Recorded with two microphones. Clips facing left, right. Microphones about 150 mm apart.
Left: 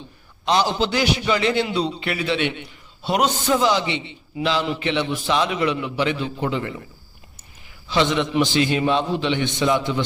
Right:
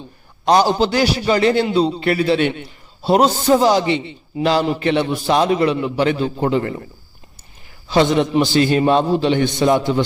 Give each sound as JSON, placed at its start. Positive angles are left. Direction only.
{"t": 0.4, "sound": "a man's voice", "side_deg": -45}
{"t": 7.9, "sound": "a man's voice", "side_deg": -40}